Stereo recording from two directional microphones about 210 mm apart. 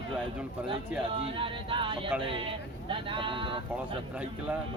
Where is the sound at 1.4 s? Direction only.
25° right (ahead or behind).